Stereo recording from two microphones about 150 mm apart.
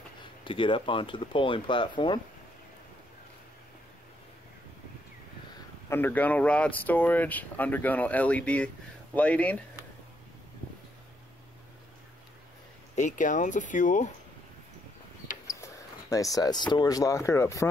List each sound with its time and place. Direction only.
0.4 s speech: 35° left (ahead or behind)
5.9 s speech: 15° left (ahead or behind)
12.9 s speech: 55° left (ahead or behind)
15.4 s speech: 20° left (ahead or behind)